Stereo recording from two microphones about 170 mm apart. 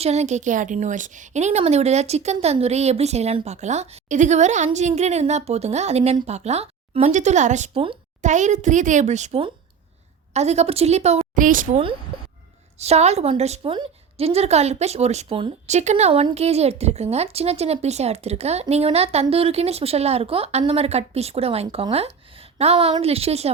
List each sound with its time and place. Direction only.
0.0 s a woman's voice: 40° right (ahead or behind)
7.7 s speech: 30° right (ahead or behind)
8.2 s a woman's voice: 45° right (ahead or behind)
12.8 s a woman's voice: 40° right (ahead or behind)